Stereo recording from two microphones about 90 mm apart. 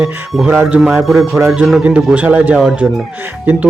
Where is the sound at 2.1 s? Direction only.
15° right (ahead or behind).